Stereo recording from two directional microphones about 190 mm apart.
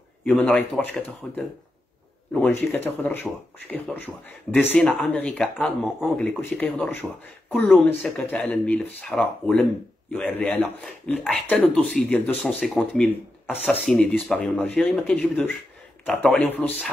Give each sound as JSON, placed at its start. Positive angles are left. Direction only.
{"t": 0.2, "sound": "speech", "side_deg": 5}
{"t": 2.4, "sound": "speech", "side_deg": 10}